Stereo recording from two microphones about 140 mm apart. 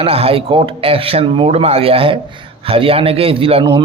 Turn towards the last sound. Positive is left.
turn(degrees=-35)  # may be behind; listen again after turning